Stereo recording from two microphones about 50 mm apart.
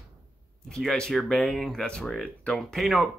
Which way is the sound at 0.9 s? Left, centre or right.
Centre.